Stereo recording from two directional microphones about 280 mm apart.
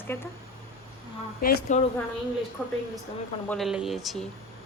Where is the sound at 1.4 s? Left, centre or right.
Left.